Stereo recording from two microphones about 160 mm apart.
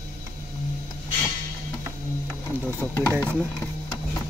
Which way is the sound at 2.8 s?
10° left (ahead or behind).